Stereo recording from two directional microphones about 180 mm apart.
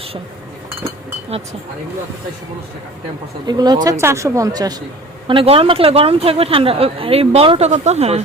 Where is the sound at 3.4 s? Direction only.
20° right (ahead or behind).